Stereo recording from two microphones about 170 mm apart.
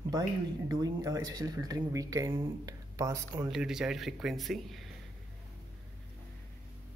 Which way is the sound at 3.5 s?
5° right (ahead or behind).